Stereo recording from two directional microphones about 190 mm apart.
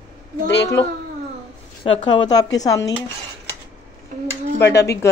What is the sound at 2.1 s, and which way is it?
Speech, 20° left (ahead or behind).